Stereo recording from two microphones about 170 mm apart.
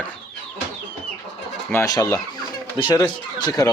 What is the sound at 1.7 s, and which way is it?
Speech, 20° left (ahead or behind).